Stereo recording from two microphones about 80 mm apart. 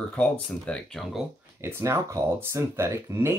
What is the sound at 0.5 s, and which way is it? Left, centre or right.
Speech, centre.